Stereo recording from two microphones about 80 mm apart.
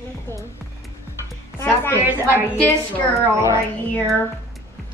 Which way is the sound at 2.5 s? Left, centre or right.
Centre.